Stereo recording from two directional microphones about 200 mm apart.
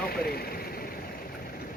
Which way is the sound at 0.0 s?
50° left (ahead or behind).